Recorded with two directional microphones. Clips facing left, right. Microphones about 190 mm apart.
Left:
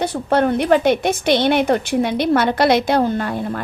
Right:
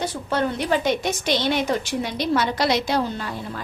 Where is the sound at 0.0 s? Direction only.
60° left (ahead or behind).